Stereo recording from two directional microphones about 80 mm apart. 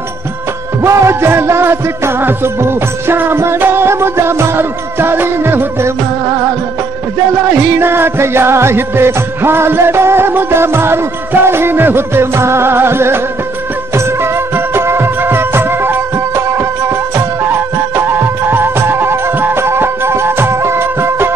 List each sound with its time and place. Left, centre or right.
0.8 s music: right
7.5 s music: right